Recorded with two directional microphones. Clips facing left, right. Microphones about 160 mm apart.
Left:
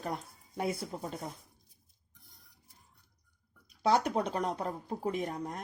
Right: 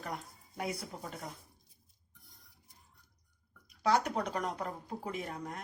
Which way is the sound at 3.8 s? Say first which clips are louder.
Left 2 dB; 30° left (ahead or behind).